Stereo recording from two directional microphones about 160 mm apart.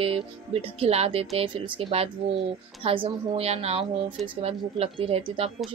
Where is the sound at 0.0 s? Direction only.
35° right (ahead or behind).